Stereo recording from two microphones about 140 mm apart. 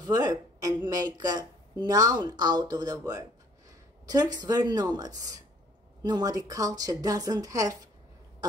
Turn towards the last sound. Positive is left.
turn(degrees=-25)  # may be behind; listen again after turning